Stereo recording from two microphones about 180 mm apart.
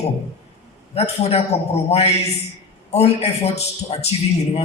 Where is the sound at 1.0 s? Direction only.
35° left (ahead or behind).